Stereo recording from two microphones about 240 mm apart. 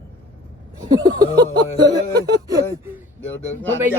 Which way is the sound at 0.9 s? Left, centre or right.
Centre.